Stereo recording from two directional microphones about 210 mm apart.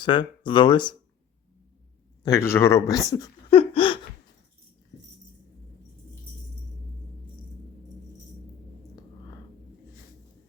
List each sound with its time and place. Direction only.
0.0 s speech: 20° left (ahead or behind)
2.2 s speech: 15° left (ahead or behind)
3.6 s a sound: 25° left (ahead or behind)